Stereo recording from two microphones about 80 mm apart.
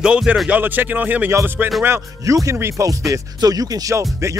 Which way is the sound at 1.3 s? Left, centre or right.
Right.